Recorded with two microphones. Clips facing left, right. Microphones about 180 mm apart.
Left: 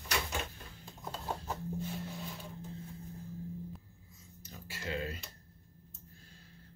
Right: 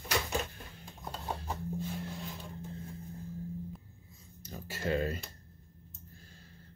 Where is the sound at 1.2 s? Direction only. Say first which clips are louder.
Right 1 dB; 10° right (ahead or behind).